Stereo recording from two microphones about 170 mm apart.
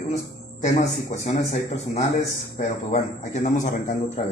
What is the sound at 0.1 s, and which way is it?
Speech, 45° left (ahead or behind).